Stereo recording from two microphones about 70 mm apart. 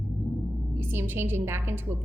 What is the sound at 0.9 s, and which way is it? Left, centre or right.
Speech, right.